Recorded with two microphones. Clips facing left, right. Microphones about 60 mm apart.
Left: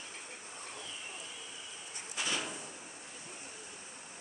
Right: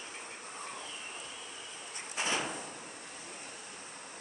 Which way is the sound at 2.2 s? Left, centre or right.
Right.